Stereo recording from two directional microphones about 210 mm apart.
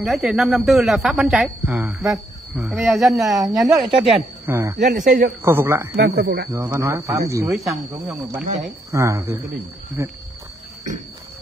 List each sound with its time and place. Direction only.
0.0 s speech: 5° right (ahead or behind)
4.5 s speech: 15° right (ahead or behind)
5.0 s speech: 40° right (ahead or behind)
5.4 s speech: 10° right (ahead or behind)
5.9 s speech: 55° right (ahead or behind)
6.5 s speech: 15° right (ahead or behind)
7.5 s speech: centre (ahead or behind)
8.9 s speech: 15° right (ahead or behind)